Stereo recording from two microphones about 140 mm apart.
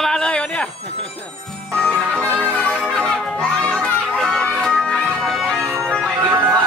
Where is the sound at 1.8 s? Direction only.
5° left (ahead or behind).